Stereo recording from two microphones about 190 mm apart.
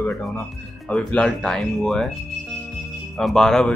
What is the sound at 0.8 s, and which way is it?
Speech, 5° left (ahead or behind).